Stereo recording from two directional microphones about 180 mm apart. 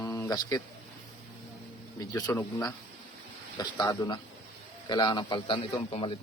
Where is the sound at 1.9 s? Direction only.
15° left (ahead or behind).